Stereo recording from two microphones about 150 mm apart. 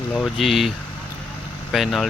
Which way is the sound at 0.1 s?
5° left (ahead or behind).